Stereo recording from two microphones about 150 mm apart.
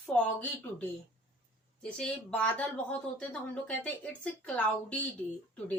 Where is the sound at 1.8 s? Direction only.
5° left (ahead or behind).